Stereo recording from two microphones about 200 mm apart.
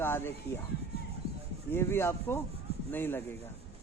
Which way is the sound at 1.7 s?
10° left (ahead or behind).